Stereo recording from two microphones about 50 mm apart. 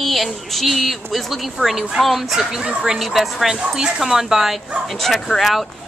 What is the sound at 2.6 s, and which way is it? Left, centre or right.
Speech, centre.